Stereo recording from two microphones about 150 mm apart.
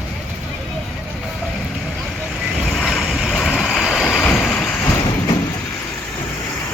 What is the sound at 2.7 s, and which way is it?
Vehicle, centre (ahead or behind).